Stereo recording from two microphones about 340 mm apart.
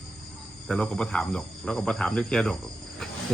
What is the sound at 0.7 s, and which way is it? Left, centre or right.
Speech, centre.